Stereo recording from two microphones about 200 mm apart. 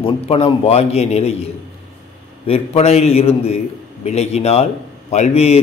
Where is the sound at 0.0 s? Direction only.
30° left (ahead or behind).